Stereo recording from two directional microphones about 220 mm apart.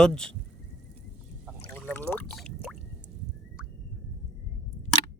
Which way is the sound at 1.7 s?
5° left (ahead or behind).